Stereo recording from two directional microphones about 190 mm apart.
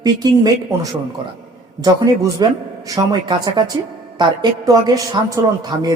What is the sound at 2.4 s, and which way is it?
Speech, 20° right (ahead or behind).